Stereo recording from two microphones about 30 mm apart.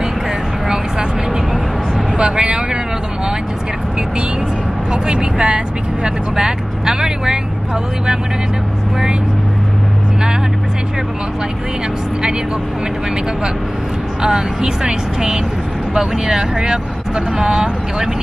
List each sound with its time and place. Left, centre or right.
2.1 s vehicle: right
4.9 s vehicle: right
6.3 s vehicle: centre
14.2 s speech: right